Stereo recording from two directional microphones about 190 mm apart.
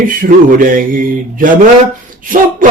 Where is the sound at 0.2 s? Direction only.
45° right (ahead or behind).